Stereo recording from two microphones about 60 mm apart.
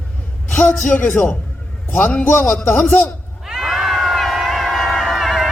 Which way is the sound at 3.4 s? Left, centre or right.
Centre.